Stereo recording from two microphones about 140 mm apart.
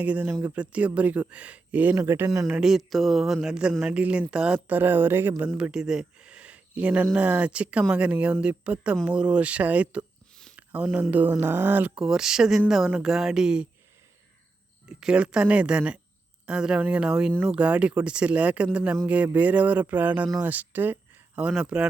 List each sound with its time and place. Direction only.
0.0 s speech: 10° right (ahead or behind)
2.6 s speech: centre (ahead or behind)
10.6 s a sound: 10° right (ahead or behind)
11.1 s speech: 15° right (ahead or behind)
14.8 s speech: 5° right (ahead or behind)